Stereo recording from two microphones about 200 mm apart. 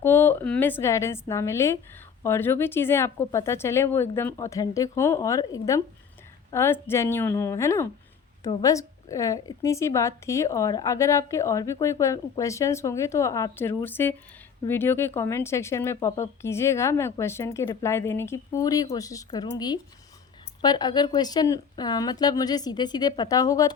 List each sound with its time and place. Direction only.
0.0 s speech: 10° left (ahead or behind)